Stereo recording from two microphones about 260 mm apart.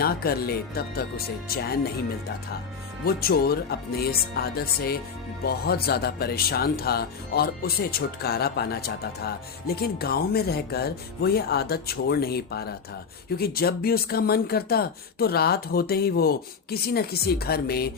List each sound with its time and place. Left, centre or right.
0.0 s speech: left
3.0 s speech: left